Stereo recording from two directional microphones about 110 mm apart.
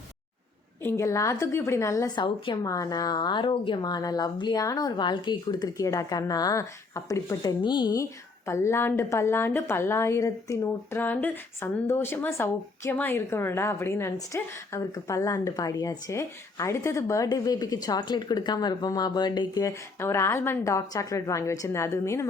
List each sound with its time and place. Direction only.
0.8 s speech: 25° left (ahead or behind)
2.1 s a woman's voice: 45° left (ahead or behind)
2.6 s a woman's voice: 30° left (ahead or behind)
7.6 s a woman's voice: 45° left (ahead or behind)
8.4 s speech: 25° left (ahead or behind)
11.0 s a woman's voice: 15° left (ahead or behind); by 19.7 s 40° left (ahead or behind)
20.0 s speech: 25° left (ahead or behind)